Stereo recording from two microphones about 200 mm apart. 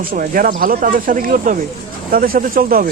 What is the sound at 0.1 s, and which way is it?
Speech, 45° right (ahead or behind).